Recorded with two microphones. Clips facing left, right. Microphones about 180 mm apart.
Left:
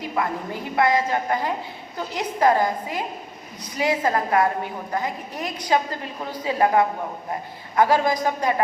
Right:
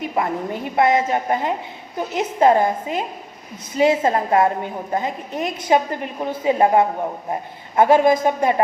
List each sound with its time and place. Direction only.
0.0 s a woman's voice: 20° right (ahead or behind)